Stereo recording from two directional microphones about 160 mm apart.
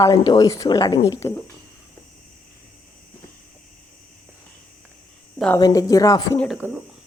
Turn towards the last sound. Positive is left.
turn(degrees=5)  # may be behind; listen again after turning